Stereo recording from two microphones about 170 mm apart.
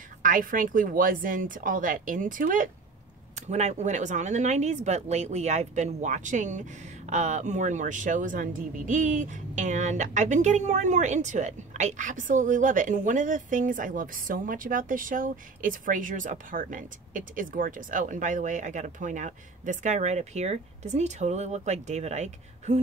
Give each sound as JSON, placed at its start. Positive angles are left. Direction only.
{"t": 0.2, "sound": "speech", "side_deg": -55}
{"t": 3.3, "sound": "speech", "side_deg": -40}